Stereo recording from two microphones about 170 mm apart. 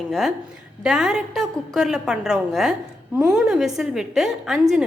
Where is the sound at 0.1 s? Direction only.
Centre (ahead or behind).